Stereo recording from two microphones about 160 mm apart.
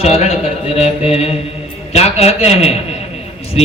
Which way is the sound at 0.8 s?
40° left (ahead or behind).